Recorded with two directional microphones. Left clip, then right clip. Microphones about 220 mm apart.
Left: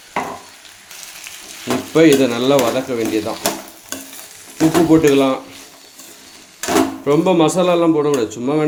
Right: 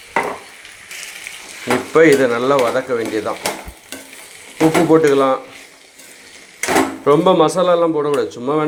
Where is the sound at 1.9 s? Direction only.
10° left (ahead or behind).